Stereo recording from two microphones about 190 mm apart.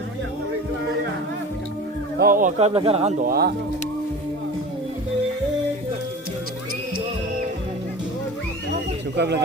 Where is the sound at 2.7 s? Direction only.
30° right (ahead or behind).